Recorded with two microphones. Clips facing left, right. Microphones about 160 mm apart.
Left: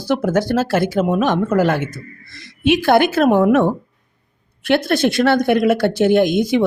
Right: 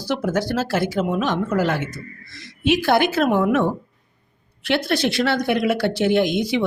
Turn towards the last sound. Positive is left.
turn(degrees=50)  # may be behind; listen again after turning